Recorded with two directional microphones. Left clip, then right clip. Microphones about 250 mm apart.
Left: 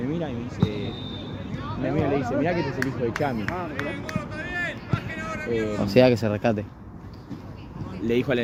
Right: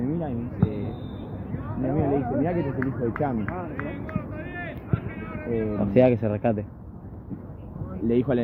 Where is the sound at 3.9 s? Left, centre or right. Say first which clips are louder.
Left 3 dB; left.